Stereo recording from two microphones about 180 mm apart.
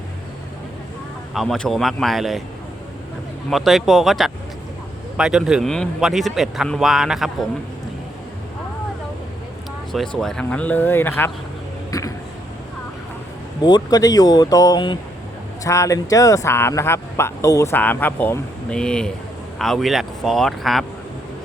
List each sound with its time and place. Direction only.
1.3 s a man's voice: centre (ahead or behind)
3.5 s a man's voice: centre (ahead or behind)
9.9 s speech: centre (ahead or behind)
11.9 s a sound: 20° left (ahead or behind)
13.6 s a man's voice: 25° left (ahead or behind); by 20.8 s centre (ahead or behind)